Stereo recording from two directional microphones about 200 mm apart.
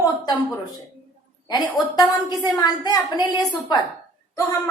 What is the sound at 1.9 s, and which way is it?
A woman's voice, 20° left (ahead or behind).